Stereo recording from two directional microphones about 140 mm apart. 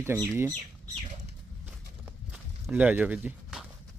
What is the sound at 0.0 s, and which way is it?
Speech, 15° right (ahead or behind).